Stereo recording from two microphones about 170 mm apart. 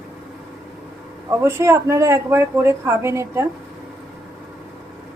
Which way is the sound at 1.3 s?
15° right (ahead or behind).